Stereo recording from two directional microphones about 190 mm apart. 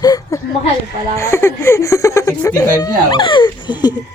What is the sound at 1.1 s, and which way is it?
Speech, 15° left (ahead or behind).